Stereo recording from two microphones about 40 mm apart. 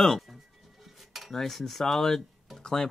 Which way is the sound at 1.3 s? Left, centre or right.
Centre.